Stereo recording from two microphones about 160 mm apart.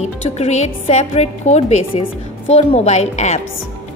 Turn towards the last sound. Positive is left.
turn(degrees=45)  # may be behind; listen again after turning